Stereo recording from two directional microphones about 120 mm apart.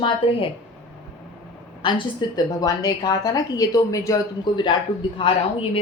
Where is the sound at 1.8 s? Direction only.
45° left (ahead or behind).